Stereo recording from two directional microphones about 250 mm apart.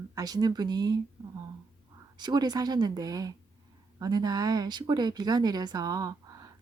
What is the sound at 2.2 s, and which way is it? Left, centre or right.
Speech, centre.